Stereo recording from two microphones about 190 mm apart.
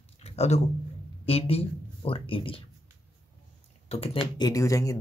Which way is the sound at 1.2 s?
30° left (ahead or behind).